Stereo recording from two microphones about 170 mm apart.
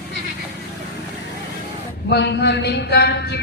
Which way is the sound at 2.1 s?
85° left.